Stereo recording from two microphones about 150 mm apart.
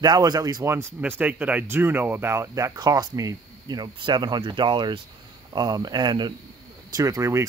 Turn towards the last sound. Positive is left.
turn(degrees=-20)  # may be behind; listen again after turning